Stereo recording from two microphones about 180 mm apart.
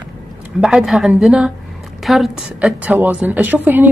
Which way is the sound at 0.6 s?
Centre (ahead or behind).